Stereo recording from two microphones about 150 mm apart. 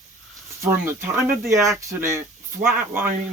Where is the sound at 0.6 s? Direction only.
15° right (ahead or behind).